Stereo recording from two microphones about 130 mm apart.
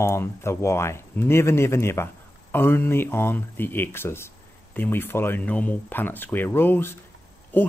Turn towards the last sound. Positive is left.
turn(degrees=15)  # may be behind; listen again after turning